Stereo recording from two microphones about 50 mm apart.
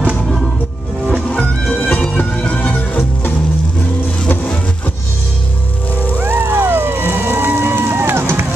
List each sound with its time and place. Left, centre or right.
1.3 s music: centre
2.1 s music: left
4.3 s music: left
6.1 s a sound: right